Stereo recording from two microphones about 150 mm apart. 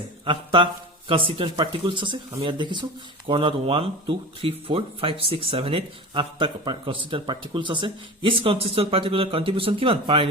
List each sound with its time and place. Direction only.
0.3 s speech: 35° right (ahead or behind)